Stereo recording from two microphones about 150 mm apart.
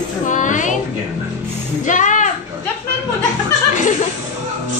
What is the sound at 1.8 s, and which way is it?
Music, 55° left (ahead or behind).